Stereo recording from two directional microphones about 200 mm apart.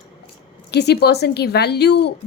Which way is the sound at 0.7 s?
55° left (ahead or behind).